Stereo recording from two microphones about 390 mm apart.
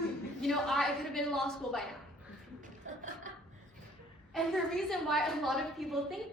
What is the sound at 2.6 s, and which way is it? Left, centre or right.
Chuckle, centre.